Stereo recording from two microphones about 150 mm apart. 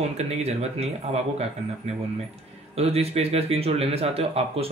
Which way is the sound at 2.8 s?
45° right (ahead or behind).